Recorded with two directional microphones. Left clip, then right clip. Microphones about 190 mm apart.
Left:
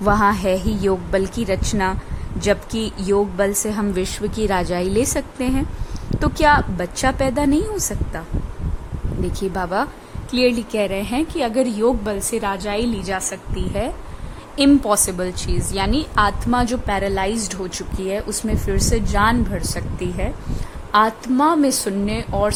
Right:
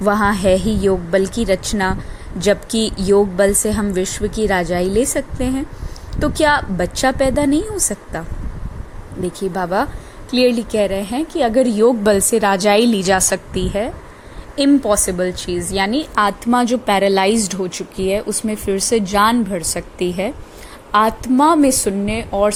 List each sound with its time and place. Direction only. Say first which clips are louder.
0.0 s a woman's voice: right 1 dB; 5° right (ahead or behind)
9.4 s a woman's voice: right 3 dB; 5° right (ahead or behind); by 13.7 s 25° right (ahead or behind)
14.5 s speech: right 1 dB; 10° right (ahead or behind)